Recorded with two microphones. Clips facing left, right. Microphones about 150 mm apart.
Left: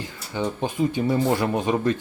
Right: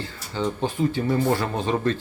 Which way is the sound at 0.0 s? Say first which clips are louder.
Even; 15° left (ahead or behind).